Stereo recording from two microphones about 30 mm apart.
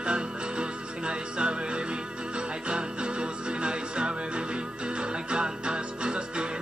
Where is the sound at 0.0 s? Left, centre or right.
Right.